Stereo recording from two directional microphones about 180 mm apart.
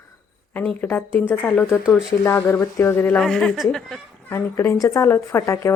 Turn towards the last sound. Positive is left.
turn(degrees=15)  # may be behind; listen again after turning